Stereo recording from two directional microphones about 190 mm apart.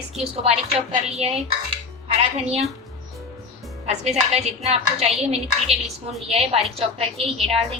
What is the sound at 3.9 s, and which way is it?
Speech, 35° right (ahead or behind).